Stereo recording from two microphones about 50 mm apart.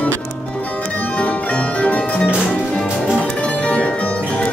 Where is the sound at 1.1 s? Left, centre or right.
Left.